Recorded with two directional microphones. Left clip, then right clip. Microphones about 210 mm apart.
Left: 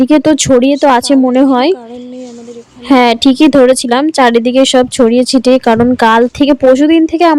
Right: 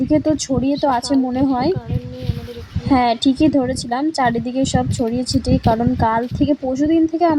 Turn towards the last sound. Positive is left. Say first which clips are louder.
# left 8 dB
turn(degrees=45)  # may be behind; listen again after turning